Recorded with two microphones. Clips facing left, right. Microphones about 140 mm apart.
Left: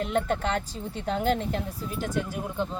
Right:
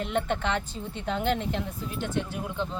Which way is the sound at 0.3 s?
40° left (ahead or behind).